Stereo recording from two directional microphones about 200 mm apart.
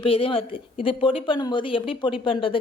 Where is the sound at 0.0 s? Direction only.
25° left (ahead or behind).